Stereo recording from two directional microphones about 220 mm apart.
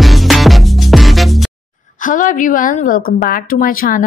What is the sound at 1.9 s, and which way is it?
A woman's voice, 35° left (ahead or behind).